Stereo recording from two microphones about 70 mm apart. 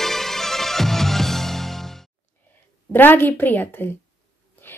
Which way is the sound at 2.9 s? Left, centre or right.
Left.